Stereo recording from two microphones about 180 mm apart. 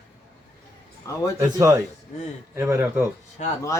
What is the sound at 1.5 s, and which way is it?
A man's voice, 20° right (ahead or behind).